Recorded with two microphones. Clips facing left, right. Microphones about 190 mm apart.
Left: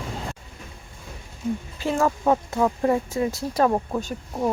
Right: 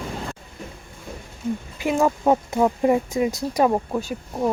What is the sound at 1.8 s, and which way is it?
Speech, 15° right (ahead or behind).